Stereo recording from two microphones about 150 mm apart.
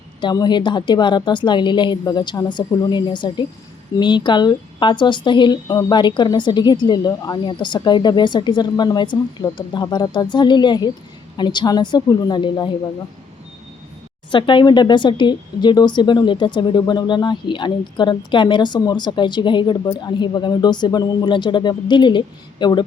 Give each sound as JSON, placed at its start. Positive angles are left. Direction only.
{"t": 0.2, "sound": "a woman's voice", "side_deg": 30}
{"t": 14.3, "sound": "a woman's voice", "side_deg": 30}